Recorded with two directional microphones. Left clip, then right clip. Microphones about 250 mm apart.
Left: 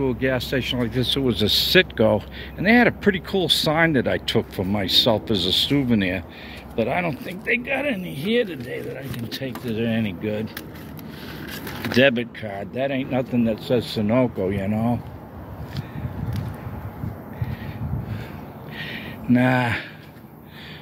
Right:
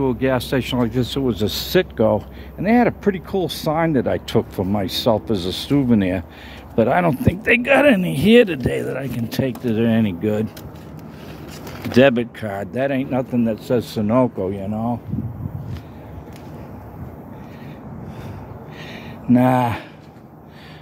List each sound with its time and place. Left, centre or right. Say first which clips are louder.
0.0 s speech: right 3 dB; centre
11.9 s speech: right 4 dB; right
14.5 s speech: even; centre
19.3 s speech: right 3 dB; centre